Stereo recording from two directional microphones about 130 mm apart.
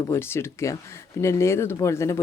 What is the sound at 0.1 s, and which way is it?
Speech, 20° left (ahead or behind).